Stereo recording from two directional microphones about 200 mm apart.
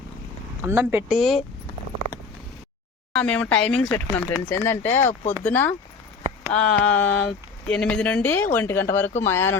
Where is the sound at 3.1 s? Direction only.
5° left (ahead or behind).